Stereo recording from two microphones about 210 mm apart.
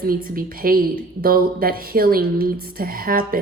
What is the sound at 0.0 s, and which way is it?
A woman's voice, 45° right (ahead or behind).